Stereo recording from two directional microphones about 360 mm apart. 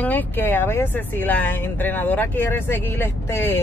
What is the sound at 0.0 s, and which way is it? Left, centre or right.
Speech, centre.